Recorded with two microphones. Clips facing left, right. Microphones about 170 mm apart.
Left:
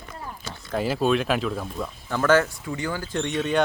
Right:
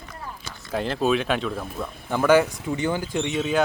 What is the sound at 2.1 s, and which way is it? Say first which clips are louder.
A woman's voice: right 2 dB; 15° right (ahead or behind).